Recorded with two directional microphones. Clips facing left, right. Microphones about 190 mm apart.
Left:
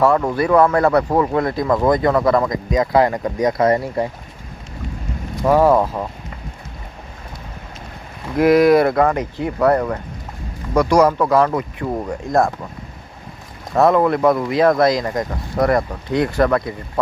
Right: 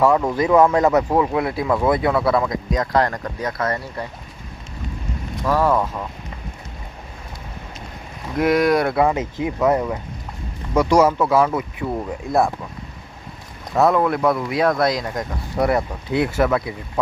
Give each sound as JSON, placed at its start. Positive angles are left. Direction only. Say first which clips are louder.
{"t": 0.0, "sound": "speech", "louder": "left 1 dB", "side_deg": -10}
{"t": 3.6, "sound": "speech", "louder": "left 8 dB", "side_deg": 25}
{"t": 5.5, "sound": "speech", "louder": "left 5 dB", "side_deg": 20}
{"t": 8.4, "sound": "speech", "louder": "left 5 dB", "side_deg": 5}
{"t": 13.7, "sound": "speech", "louder": "left 3 dB", "side_deg": 0}